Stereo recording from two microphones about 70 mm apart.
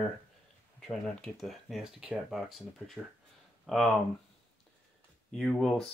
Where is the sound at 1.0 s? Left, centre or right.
Centre.